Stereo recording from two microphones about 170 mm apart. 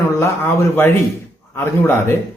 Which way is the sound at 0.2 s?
15° left (ahead or behind).